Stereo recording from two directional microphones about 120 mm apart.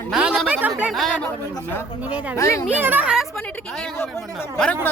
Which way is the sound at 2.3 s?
25° left (ahead or behind).